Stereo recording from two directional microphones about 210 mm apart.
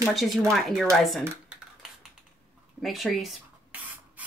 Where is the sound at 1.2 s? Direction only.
10° right (ahead or behind).